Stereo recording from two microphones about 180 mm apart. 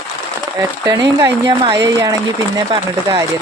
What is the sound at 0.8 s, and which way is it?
Speech, 20° right (ahead or behind).